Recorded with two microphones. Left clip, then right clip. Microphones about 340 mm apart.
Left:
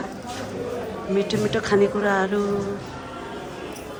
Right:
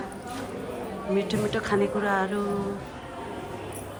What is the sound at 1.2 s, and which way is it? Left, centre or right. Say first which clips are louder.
Speech: left 6 dB; centre.